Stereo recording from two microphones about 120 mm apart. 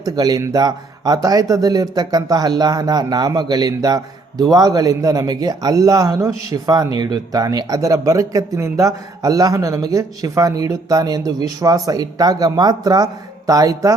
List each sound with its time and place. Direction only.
0.0 s speech: 30° right (ahead or behind)